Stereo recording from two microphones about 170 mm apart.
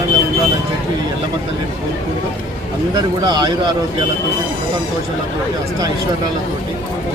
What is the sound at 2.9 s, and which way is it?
Speech, 25° right (ahead or behind).